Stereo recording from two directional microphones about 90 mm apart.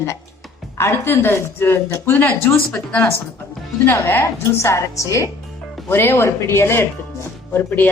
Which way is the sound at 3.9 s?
30° left (ahead or behind).